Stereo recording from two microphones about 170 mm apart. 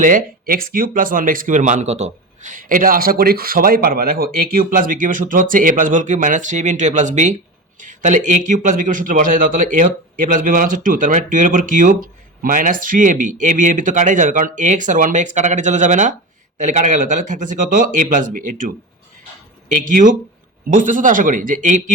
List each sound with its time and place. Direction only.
0.0 s speech: 55° right (ahead or behind)